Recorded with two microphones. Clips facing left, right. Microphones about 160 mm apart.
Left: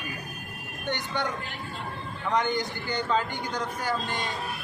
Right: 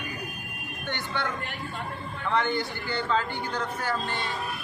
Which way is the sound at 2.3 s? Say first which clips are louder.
Even; 15° left (ahead or behind).